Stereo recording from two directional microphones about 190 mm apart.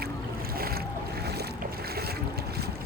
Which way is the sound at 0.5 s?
50° right (ahead or behind).